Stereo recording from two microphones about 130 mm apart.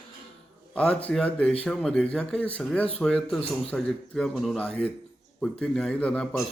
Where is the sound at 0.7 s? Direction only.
5° left (ahead or behind).